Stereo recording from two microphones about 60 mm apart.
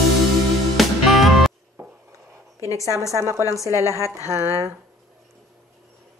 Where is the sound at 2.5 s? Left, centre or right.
Left.